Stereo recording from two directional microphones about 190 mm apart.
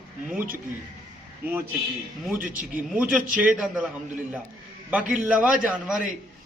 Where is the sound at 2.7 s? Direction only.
5° right (ahead or behind).